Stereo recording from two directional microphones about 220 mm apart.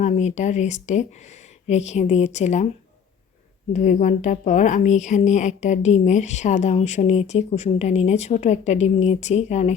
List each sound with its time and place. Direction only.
0.0 s speech: 30° left (ahead or behind)
3.7 s speech: 35° left (ahead or behind)